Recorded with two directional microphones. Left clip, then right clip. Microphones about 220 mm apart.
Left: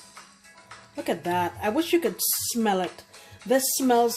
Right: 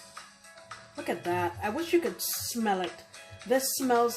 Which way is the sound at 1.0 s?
45° left (ahead or behind).